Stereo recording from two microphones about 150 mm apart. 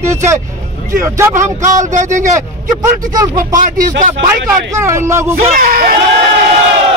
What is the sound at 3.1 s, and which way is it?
Speech, 25° right (ahead or behind).